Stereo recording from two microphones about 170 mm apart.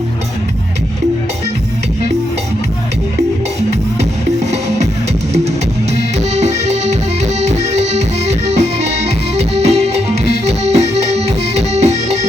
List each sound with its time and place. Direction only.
6.3 s music: 40° right (ahead or behind)
10.4 s accordion: 40° right (ahead or behind)